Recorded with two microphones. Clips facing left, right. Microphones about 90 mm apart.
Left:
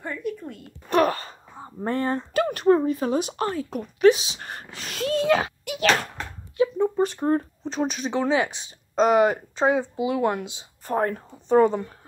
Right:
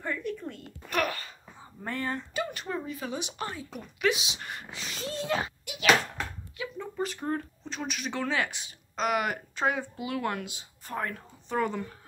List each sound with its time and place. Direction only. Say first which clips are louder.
0.0 s a sound: left 3 dB; 15° left (ahead or behind)
0.8 s wail: left 9 dB; 35° left (ahead or behind)
1.8 s speech: left 8 dB; 35° left (ahead or behind)
2.3 s speech: left 14 dB; 50° left (ahead or behind); by 5.5 s 90° left
6.5 s a sound: left 15 dB; 30° left (ahead or behind)
8.1 s speech: left 6 dB; 20° left (ahead or behind)
10.9 s a woman's voice: left 10 dB; 35° left (ahead or behind)